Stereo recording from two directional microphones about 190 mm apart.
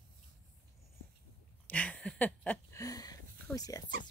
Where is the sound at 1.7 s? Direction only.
10° left (ahead or behind).